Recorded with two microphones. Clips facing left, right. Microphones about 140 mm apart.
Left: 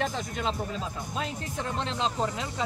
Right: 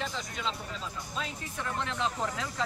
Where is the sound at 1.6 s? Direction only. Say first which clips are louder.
Left 2 dB; 25° left (ahead or behind).